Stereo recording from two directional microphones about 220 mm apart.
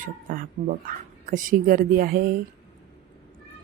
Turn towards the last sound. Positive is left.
turn(degrees=-40)  # may be behind; listen again after turning